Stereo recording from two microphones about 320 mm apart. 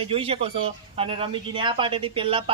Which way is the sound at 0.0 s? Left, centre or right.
Centre.